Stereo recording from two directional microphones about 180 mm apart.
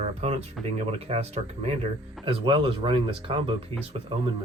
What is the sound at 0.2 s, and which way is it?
Speech, 35° right (ahead or behind).